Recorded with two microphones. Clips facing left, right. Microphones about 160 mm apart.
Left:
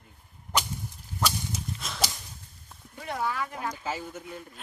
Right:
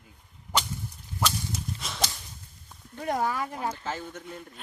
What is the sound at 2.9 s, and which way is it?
Speech, 45° right (ahead or behind).